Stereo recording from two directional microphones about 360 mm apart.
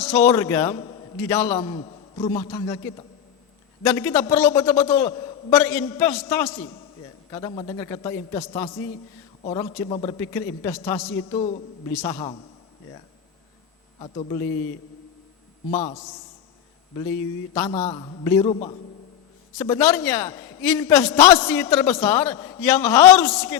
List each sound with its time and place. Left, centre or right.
0.0 s a man's voice: centre
14.0 s a man's voice: centre
15.7 s a man's voice: centre
17.5 s a man's voice: centre